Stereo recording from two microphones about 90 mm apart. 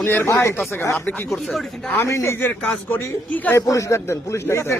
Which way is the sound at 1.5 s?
Centre (ahead or behind).